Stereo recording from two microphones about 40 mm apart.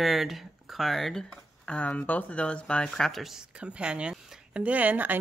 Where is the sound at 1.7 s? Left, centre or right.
Left.